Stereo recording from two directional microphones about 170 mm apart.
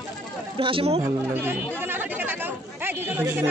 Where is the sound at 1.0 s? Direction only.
15° right (ahead or behind).